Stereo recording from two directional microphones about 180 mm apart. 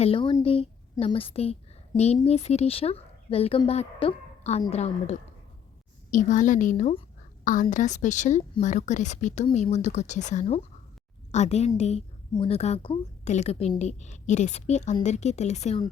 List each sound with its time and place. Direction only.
0.0 s a woman's voice: 30° left (ahead or behind)